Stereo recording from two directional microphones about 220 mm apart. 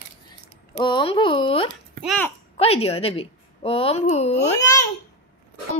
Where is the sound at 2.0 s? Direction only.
Centre (ahead or behind).